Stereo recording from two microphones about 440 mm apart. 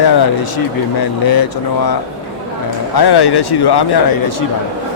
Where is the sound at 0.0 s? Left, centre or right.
Left.